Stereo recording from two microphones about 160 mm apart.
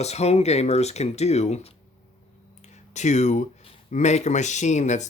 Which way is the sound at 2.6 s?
45° left (ahead or behind).